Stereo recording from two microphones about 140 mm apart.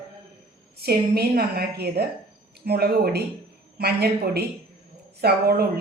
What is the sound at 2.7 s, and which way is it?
Speech, 90° right.